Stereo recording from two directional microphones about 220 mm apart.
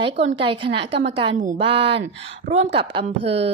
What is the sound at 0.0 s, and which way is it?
A woman's voice, 25° right (ahead or behind).